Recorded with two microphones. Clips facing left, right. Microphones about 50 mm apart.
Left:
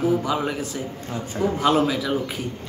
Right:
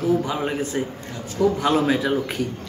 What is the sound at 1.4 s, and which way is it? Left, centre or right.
Speech, left.